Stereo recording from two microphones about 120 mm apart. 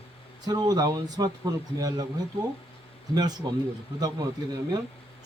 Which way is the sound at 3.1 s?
35° right (ahead or behind).